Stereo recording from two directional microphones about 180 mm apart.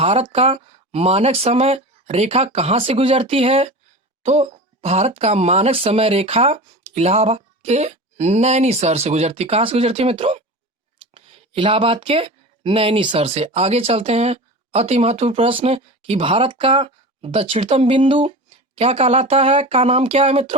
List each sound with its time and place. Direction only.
0.0 s speech: 35° right (ahead or behind)